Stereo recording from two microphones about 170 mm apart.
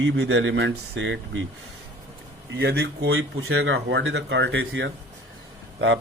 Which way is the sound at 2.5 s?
75° right (ahead or behind).